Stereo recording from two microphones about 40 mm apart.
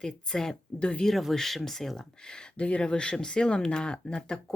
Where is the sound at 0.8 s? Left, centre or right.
Left.